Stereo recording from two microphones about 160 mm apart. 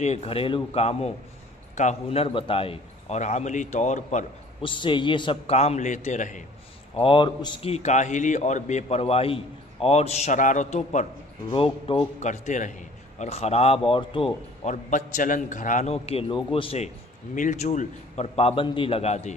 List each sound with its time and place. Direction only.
0.0 s a man's voice: 40° left (ahead or behind)
4.6 s a man's voice: 30° left (ahead or behind); by 6.4 s 50° left (ahead or behind)
7.0 s a man's voice: 30° left (ahead or behind); by 11.1 s 50° left (ahead or behind)
11.5 s a man's voice: 35° left (ahead or behind)
12.3 s a man's voice: 50° left (ahead or behind); by 14.7 s 35° left (ahead or behind)
14.7 s a man's voice: 50° left (ahead or behind)